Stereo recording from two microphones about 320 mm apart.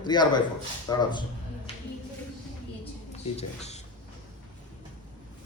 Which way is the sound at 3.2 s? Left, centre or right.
Centre.